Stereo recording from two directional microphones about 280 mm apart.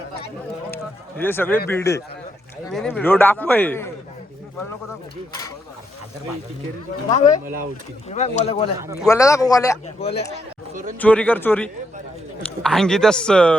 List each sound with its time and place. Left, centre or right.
0.7 s a sound: centre
1.7 s speech: centre
8.1 s speech: left
8.8 s speech: centre
9.0 s speech: centre
10.3 s a sound: right
11.0 s speech: centre